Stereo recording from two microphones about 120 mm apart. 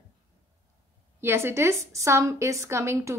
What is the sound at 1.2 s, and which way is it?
A woman's voice, 20° right (ahead or behind).